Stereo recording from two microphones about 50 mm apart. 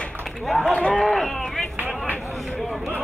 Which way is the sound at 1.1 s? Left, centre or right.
Centre.